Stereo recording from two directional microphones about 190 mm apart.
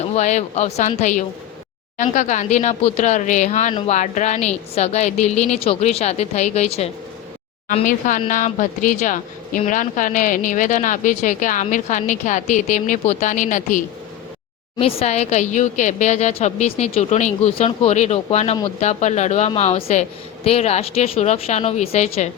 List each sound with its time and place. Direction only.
0.0 s a woman's voice: 35° left (ahead or behind)
7.7 s speech: 40° left (ahead or behind)
14.8 s a woman's voice: 30° left (ahead or behind)